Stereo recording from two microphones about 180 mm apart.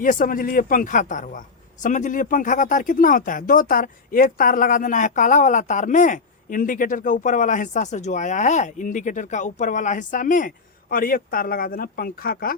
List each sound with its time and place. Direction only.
0.0 s a man's voice: 50° left (ahead or behind)